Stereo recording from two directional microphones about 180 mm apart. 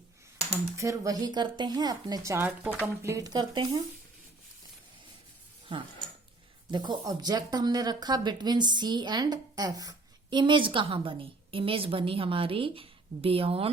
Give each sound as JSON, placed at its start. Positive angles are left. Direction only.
{"t": 0.8, "sound": "speech", "side_deg": -20}
{"t": 5.7, "sound": "speech", "side_deg": -25}